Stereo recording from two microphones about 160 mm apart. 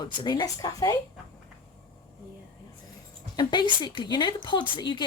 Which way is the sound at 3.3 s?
30° left (ahead or behind).